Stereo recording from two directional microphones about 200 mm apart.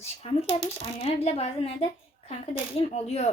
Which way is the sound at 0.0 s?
30° left (ahead or behind).